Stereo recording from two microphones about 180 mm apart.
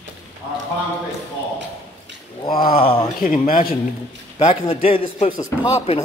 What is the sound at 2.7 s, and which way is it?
Speech, 45° left (ahead or behind).